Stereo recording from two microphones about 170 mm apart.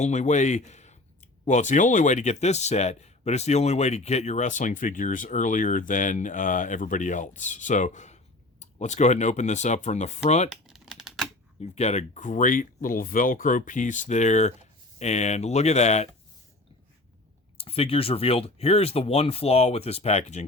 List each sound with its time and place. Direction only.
0.0 s speech: 45° left (ahead or behind)
10.5 s typewriter: centre (ahead or behind)
11.6 s speech: 40° left (ahead or behind)
17.6 s speech: 35° left (ahead or behind)